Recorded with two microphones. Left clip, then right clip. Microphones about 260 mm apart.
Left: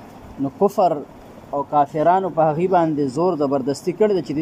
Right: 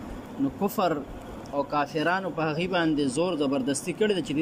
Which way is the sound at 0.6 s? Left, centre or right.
Left.